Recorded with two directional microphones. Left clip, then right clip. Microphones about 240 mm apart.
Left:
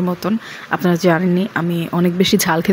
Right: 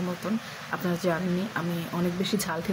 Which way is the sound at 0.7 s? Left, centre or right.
Left.